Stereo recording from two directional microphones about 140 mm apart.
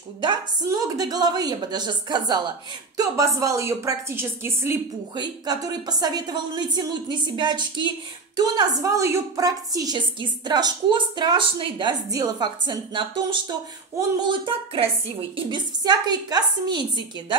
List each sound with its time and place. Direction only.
0.2 s a woman's voice: 35° right (ahead or behind); by 4.7 s 15° right (ahead or behind)
5.1 s a woman's voice: 30° right (ahead or behind)